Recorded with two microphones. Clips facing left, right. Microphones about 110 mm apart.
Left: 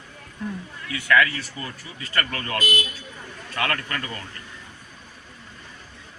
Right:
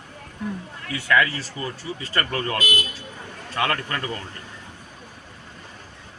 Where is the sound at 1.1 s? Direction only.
30° right (ahead or behind).